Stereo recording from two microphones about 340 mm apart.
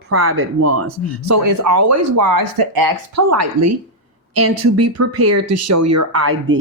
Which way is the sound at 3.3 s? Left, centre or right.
Right.